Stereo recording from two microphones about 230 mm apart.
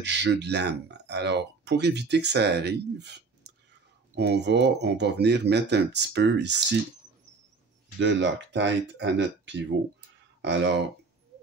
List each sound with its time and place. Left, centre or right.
0.0 s speech: right
8.0 s speech: right